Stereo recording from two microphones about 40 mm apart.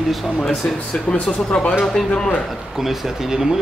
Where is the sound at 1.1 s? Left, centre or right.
Left.